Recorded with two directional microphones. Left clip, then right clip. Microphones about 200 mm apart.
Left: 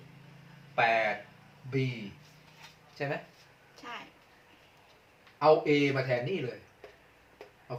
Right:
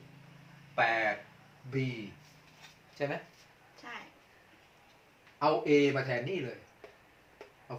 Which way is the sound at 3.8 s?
50° left (ahead or behind).